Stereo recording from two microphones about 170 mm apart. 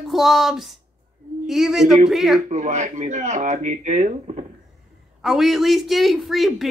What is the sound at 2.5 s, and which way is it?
Speech, 45° right (ahead or behind).